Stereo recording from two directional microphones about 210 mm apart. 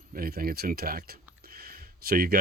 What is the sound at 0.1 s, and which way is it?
Speech, 45° right (ahead or behind).